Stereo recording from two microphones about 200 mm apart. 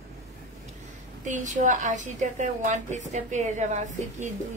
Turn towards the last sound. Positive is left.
turn(degrees=-40)  # may be behind; listen again after turning